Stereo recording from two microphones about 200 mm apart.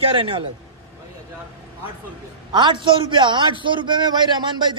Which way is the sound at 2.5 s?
25° right (ahead or behind).